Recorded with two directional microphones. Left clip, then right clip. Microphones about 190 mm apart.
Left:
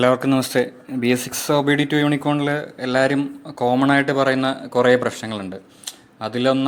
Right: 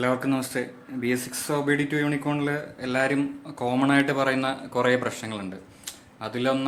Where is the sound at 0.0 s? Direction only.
40° left (ahead or behind).